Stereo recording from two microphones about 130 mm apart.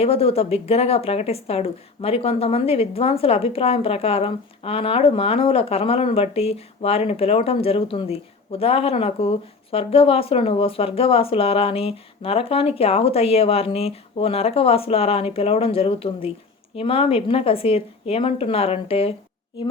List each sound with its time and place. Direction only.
0.0 s speech: 50° left (ahead or behind)